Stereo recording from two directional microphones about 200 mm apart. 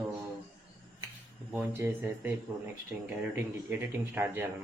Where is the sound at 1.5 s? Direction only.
10° right (ahead or behind).